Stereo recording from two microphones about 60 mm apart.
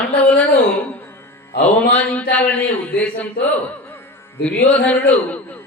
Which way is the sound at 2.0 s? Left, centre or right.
Left.